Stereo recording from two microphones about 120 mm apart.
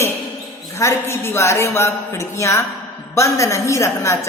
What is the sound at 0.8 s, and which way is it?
A woman's voice, 20° left (ahead or behind).